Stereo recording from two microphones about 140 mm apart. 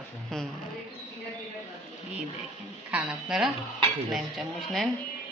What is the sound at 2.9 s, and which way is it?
A woman's voice, 5° right (ahead or behind).